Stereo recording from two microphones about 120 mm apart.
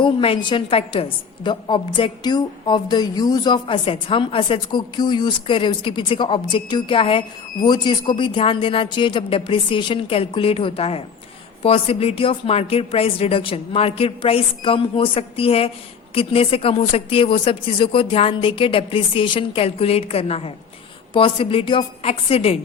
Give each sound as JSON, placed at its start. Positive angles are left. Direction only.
{"t": 0.0, "sound": "a woman's voice", "side_deg": 45}
{"t": 1.5, "sound": "a woman's voice", "side_deg": 40}
{"t": 7.6, "sound": "a woman's voice", "side_deg": 35}